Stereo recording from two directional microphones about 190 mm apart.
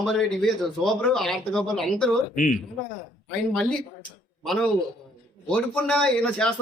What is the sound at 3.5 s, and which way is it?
Speech, 5° left (ahead or behind).